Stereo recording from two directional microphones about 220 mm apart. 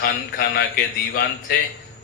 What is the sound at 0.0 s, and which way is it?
Speech, 45° left (ahead or behind).